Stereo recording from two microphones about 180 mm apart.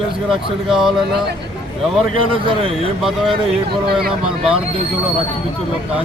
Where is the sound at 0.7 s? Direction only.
Centre (ahead or behind).